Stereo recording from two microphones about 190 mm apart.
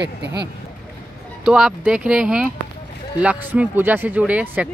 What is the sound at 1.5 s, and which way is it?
Speech, 5° right (ahead or behind).